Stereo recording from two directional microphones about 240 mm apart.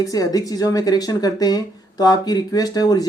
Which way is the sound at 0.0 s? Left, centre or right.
Centre.